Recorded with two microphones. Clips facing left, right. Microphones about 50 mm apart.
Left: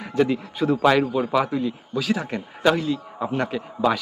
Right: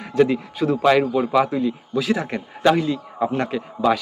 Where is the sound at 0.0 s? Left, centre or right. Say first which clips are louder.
Right 3 dB; centre.